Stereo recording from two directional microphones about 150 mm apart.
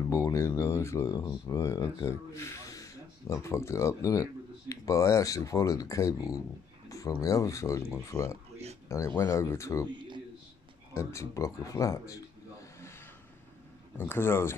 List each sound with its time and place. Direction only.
0.1 s speech: 20° left (ahead or behind)
9.8 s a sound: 30° right (ahead or behind)
11.0 s speech: 20° left (ahead or behind)